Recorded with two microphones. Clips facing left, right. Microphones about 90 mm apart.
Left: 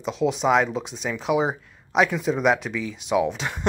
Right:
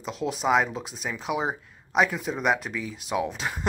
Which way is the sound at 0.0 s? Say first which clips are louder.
Left 5 dB; centre (ahead or behind).